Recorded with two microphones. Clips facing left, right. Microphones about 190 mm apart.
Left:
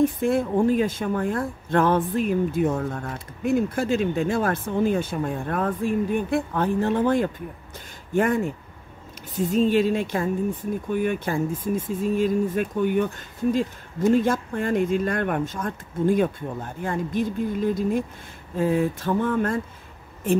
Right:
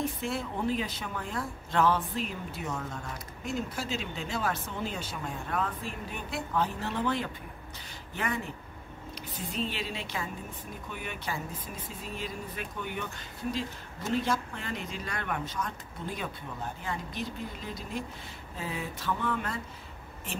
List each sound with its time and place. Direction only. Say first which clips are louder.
0.2 s speech: left 12 dB; 50° left (ahead or behind)